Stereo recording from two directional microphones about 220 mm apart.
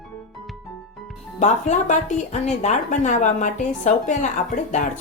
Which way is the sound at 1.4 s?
35° left (ahead or behind).